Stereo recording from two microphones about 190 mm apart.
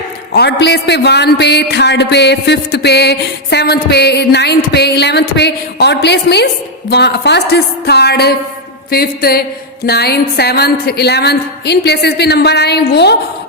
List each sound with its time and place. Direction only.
0.3 s a man's voice: 60° left (ahead or behind)
8.9 s music: 55° left (ahead or behind)
9.8 s a man's voice: 55° left (ahead or behind)